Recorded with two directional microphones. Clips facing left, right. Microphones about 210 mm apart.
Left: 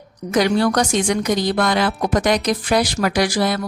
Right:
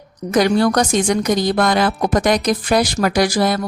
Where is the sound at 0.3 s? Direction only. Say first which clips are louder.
Right 2 dB; 45° right (ahead or behind).